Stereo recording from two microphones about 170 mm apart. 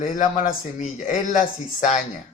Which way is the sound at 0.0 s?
45° left (ahead or behind).